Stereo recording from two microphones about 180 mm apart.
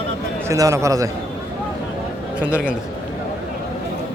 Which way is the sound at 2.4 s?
5° right (ahead or behind).